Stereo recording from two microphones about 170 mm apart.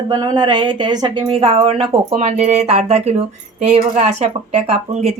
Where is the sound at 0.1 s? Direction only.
25° right (ahead or behind).